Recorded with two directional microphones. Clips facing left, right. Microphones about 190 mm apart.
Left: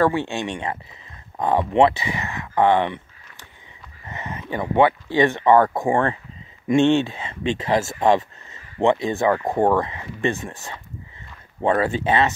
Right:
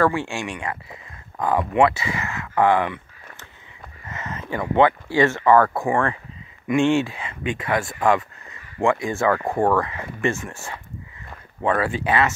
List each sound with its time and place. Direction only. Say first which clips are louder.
0.0 s speech: left 1 dB; 20° left (ahead or behind)
4.0 s speech: even; 20° left (ahead or behind)
11.8 s speech: left 1 dB; 25° left (ahead or behind)